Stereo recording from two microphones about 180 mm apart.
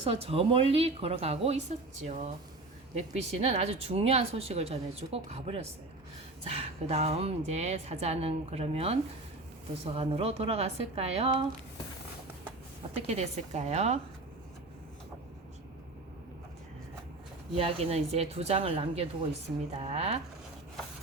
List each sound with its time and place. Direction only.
0.0 s speech: 35° right (ahead or behind)
12.5 s speech: 35° right (ahead or behind)
17.6 s speech: 35° right (ahead or behind)